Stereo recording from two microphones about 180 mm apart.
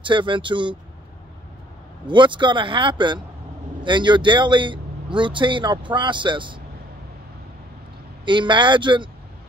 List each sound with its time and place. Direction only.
0.0 s speech: 25° right (ahead or behind)
2.0 s speech: 25° right (ahead or behind)
8.3 s speech: 25° right (ahead or behind)